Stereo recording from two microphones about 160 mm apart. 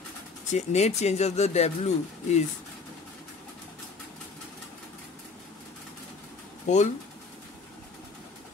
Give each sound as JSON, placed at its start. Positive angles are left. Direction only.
{"t": 0.5, "sound": "speech", "side_deg": 45}
{"t": 6.7, "sound": "speech", "side_deg": 50}